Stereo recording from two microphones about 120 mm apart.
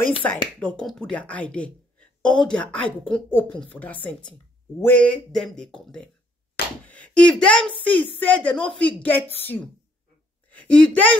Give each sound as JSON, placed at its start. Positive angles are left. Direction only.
{"t": 0.2, "sound": "speech", "side_deg": 20}
{"t": 0.6, "sound": "speech", "side_deg": 5}